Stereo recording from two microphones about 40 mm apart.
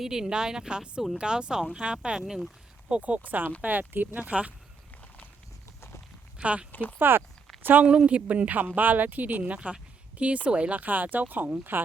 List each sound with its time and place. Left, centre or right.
0.0 s speech: centre
2.9 s speech: right
4.3 s speech: right
6.4 s speech: right
6.7 s speech: left
7.6 s a woman's voice: right
7.9 s speech: right